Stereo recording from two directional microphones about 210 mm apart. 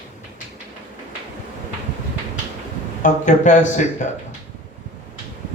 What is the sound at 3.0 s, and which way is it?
Speech, 35° left (ahead or behind).